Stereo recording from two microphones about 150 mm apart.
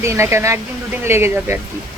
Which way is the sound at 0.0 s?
20° right (ahead or behind).